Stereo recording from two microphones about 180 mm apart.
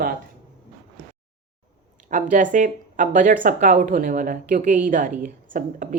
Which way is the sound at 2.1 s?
45° right (ahead or behind).